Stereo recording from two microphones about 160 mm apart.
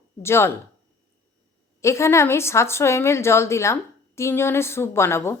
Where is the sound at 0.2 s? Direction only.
15° left (ahead or behind).